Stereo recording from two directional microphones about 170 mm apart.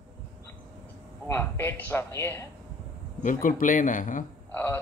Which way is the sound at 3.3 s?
55° left (ahead or behind).